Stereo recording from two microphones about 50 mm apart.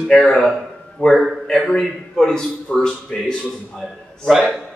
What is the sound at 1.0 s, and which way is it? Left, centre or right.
A man's voice, centre.